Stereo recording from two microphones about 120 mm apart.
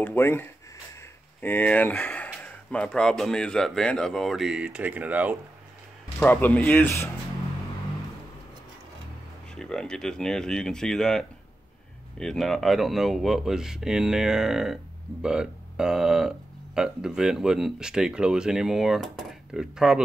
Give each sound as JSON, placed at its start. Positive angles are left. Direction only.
{"t": 0.0, "sound": "speech", "side_deg": 15}
{"t": 6.1, "sound": "speech", "side_deg": 15}
{"t": 9.6, "sound": "speech", "side_deg": 5}